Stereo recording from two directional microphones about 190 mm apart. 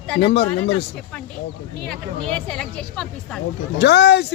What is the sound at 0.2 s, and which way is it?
Speech, 60° left (ahead or behind).